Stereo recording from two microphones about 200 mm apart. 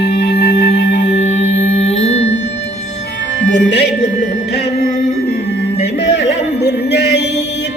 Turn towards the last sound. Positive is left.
turn(degrees=55)  # may be behind; listen again after turning